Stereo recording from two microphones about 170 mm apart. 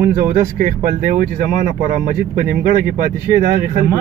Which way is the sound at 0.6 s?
50° right (ahead or behind).